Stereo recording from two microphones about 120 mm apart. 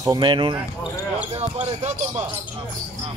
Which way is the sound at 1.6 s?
70° right (ahead or behind).